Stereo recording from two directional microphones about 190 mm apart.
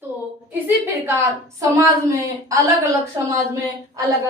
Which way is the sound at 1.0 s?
15° right (ahead or behind).